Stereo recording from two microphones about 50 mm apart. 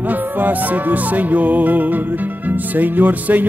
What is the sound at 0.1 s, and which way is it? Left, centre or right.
Music, right.